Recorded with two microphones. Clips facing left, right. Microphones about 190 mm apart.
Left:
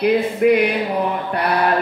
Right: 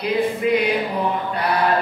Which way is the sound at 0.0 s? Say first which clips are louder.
Left 5 dB; 60° left (ahead or behind).